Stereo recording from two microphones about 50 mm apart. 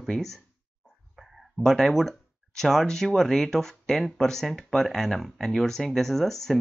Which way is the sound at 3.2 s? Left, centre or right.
Centre.